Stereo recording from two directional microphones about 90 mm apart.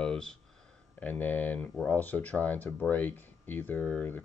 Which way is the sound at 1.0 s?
20° left (ahead or behind).